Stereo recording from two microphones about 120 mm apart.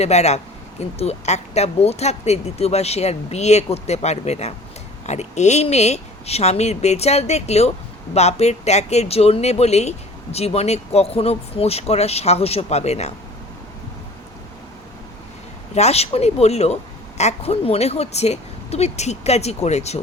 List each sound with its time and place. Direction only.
0.0 s speech: 65° left (ahead or behind)
15.7 s speech: 65° left (ahead or behind)